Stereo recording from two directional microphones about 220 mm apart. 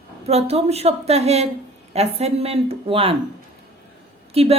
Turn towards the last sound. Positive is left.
turn(degrees=-25)  # may be behind; listen again after turning